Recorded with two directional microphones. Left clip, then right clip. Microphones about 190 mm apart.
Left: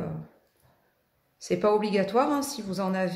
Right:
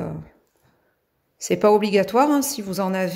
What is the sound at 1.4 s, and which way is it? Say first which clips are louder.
A woman's voice: right 7 dB; 50° right (ahead or behind).